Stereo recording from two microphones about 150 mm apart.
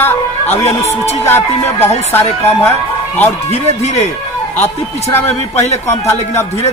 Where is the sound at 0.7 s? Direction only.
45° left (ahead or behind).